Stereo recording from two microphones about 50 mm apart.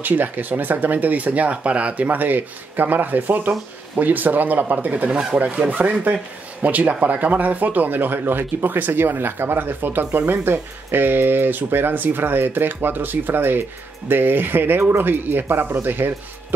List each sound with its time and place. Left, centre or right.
0.0 s speech: right
10.4 s speech: right
14.8 s speech: right